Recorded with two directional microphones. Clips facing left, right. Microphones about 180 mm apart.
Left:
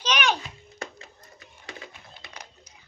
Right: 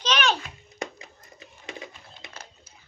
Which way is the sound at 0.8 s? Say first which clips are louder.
Right 4 dB; 20° right (ahead or behind).